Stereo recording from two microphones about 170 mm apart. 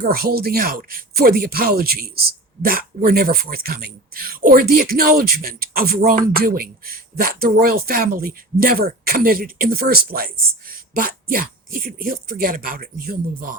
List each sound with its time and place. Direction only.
0.0 s speech: 60° right (ahead or behind)